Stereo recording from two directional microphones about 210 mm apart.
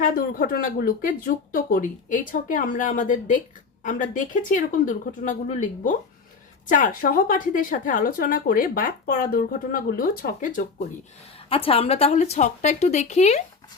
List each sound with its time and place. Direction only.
0.0 s a woman's voice: 45° left (ahead or behind)
11.3 s speech: 25° left (ahead or behind)